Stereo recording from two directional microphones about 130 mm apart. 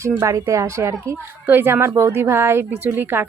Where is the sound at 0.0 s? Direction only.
20° right (ahead or behind).